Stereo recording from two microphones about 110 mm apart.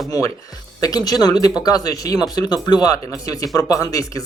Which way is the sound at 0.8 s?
35° left (ahead or behind).